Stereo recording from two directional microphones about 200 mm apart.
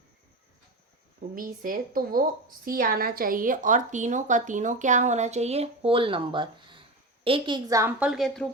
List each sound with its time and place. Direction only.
1.4 s a woman's voice: 45° right (ahead or behind); by 8.4 s centre (ahead or behind)